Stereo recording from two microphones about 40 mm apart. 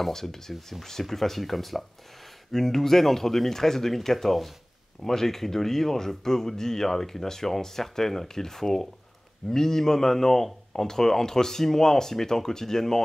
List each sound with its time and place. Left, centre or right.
0.0 s speech: centre